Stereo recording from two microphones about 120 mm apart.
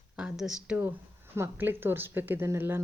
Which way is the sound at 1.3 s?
20° right (ahead or behind).